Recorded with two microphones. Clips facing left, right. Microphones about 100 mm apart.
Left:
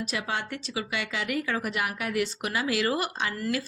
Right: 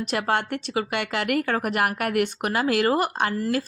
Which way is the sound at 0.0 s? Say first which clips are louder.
Right 7 dB; 60° right (ahead or behind).